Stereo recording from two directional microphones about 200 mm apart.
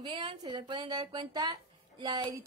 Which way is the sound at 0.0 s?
25° right (ahead or behind).